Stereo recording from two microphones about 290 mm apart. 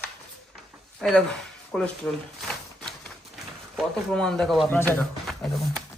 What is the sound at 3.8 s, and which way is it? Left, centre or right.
Speech, centre.